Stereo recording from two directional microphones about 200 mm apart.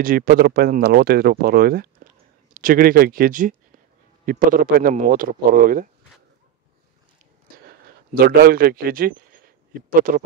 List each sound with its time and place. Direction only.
0.0 s speech: 45° right (ahead or behind)
8.1 s a man's voice: 50° right (ahead or behind)